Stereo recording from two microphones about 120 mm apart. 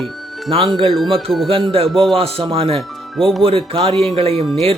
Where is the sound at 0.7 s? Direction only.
45° right (ahead or behind).